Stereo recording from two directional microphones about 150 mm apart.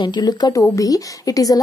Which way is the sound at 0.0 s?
30° left (ahead or behind).